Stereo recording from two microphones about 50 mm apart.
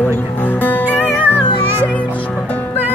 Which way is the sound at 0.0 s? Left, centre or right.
Left.